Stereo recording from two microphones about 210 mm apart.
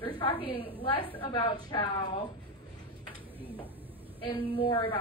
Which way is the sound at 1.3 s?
20° left (ahead or behind).